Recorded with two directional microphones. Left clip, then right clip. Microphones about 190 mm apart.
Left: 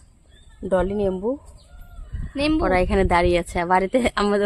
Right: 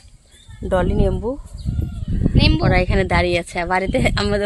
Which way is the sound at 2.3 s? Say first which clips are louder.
Right 2 dB; 45° left (ahead or behind).